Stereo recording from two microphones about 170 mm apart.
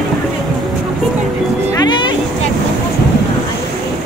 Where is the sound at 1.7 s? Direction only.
25° left (ahead or behind).